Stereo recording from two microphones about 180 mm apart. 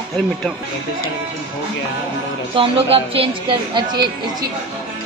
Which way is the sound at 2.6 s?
30° right (ahead or behind).